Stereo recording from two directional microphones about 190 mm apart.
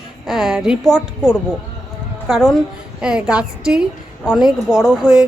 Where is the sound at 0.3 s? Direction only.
5° right (ahead or behind).